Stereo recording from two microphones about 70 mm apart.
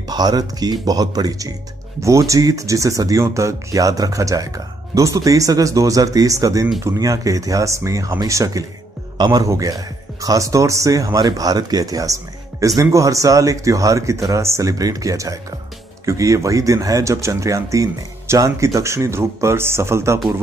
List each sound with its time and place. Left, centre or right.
0.1 s speech: right
2.0 s speech: right
11.1 s speech: right